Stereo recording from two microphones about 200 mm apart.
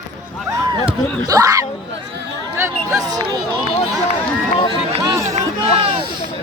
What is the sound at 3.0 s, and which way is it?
Speech, 20° right (ahead or behind).